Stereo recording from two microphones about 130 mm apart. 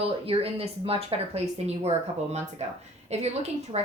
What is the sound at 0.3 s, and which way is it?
A woman's voice, 50° right (ahead or behind).